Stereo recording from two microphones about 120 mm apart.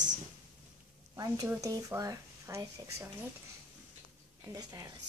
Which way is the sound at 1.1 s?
30° right (ahead or behind).